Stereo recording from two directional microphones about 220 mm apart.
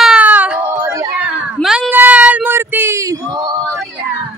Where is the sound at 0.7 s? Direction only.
15° right (ahead or behind).